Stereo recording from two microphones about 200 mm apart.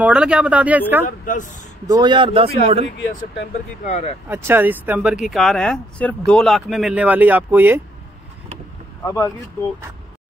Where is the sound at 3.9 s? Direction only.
35° left (ahead or behind).